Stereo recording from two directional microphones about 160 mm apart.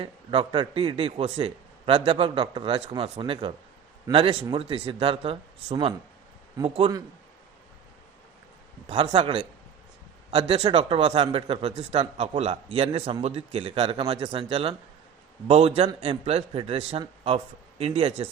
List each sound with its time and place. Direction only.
0.0 s a man's voice: 35° right (ahead or behind)
8.9 s speech: 30° right (ahead or behind)